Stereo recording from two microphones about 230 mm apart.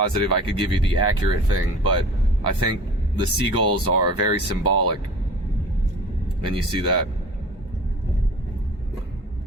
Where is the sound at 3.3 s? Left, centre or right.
Right.